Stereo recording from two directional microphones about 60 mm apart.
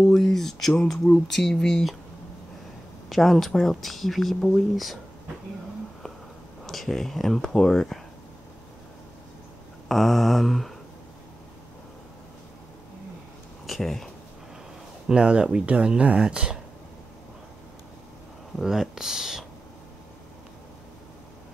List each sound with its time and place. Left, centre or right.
0.0 s speech: centre
3.1 s speech: centre
6.6 s speech: centre
9.8 s speech: centre
13.7 s speech: centre
15.0 s speech: centre
18.6 s speech: centre